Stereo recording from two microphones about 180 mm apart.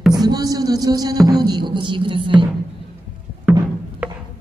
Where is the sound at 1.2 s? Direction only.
20° right (ahead or behind).